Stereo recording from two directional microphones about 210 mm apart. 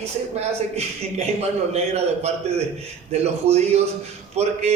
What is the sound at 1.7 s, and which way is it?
A man's voice, 30° right (ahead or behind).